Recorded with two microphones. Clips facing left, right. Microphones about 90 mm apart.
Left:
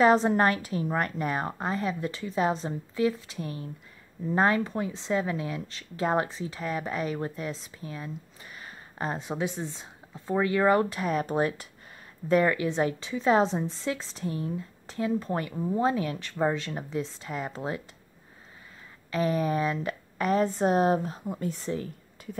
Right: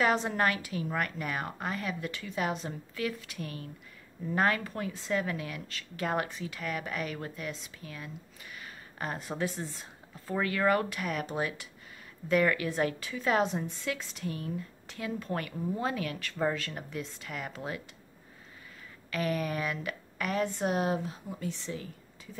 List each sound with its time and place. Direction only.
0.0 s a woman's voice: 35° left (ahead or behind)
19.0 s a woman's voice: 30° left (ahead or behind); by 22.4 s 50° left (ahead or behind)